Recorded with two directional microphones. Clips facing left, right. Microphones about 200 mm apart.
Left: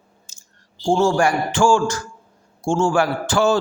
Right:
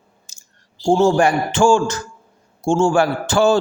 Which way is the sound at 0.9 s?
20° right (ahead or behind).